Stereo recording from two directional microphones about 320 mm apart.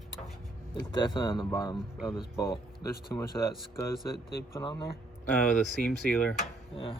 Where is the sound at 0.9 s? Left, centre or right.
Centre.